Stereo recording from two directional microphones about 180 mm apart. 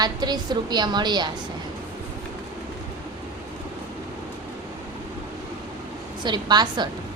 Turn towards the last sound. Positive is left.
turn(degrees=-25)  # may be behind; listen again after turning